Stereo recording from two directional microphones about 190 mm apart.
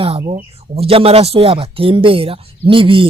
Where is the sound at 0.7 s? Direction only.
30° right (ahead or behind).